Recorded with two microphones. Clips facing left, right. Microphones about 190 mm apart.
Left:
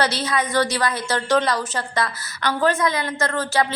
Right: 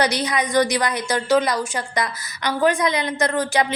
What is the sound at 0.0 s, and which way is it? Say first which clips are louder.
A woman's voice: right 1 dB; 15° right (ahead or behind).